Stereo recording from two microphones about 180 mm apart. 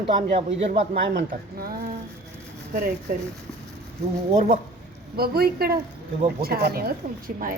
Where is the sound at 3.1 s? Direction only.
50° right (ahead or behind).